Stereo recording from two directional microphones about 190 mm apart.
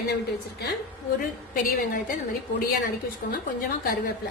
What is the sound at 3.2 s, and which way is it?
Speech, 50° left (ahead or behind).